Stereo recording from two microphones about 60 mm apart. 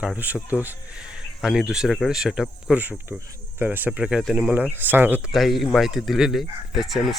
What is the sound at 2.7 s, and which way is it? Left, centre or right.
Speech, right.